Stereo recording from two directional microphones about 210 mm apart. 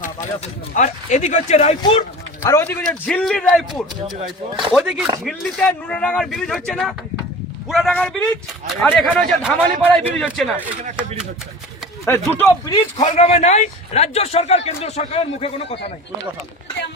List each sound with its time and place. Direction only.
0.0 s speech: 35° left (ahead or behind)
2.4 s a man's voice: 10° left (ahead or behind)
12.4 s speech: 15° left (ahead or behind)
13.0 s a man's voice: 30° left (ahead or behind)